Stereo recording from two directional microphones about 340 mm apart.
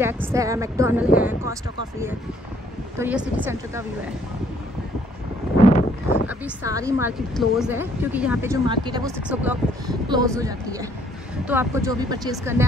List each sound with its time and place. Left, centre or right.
0.0 s a woman's voice: centre
5.7 s a sound: centre
6.2 s speech: centre